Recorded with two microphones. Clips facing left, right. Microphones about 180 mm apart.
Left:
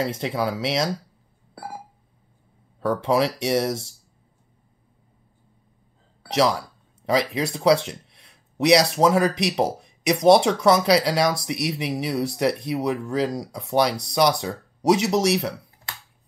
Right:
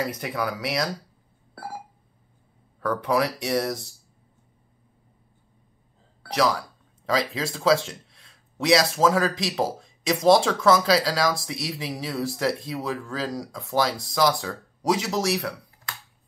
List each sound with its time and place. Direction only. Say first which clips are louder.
0.0 s speech: left 3 dB; 25° left (ahead or behind)
1.5 s telephone dialing: even; centre (ahead or behind)
2.8 s speech: left 3 dB; 25° left (ahead or behind)
6.2 s speech: left 2 dB; 25° left (ahead or behind)